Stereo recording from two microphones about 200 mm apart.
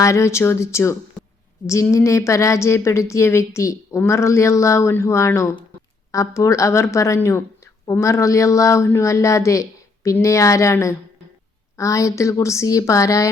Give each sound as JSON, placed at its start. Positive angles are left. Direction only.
{"t": 0.0, "sound": "speech", "side_deg": 15}